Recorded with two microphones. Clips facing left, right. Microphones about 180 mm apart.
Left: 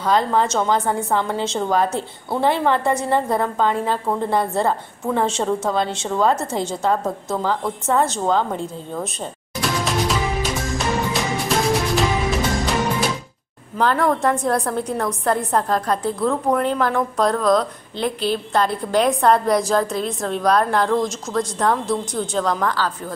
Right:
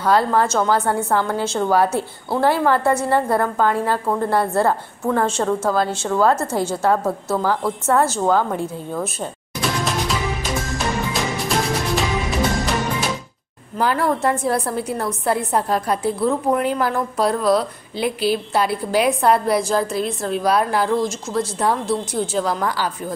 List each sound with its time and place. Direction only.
0.0 s a woman's voice: 5° right (ahead or behind)
11.4 s music: centre (ahead or behind)
13.7 s a woman's voice: 5° right (ahead or behind)